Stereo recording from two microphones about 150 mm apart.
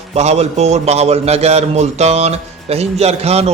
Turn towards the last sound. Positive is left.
turn(degrees=-45)  # may be behind; listen again after turning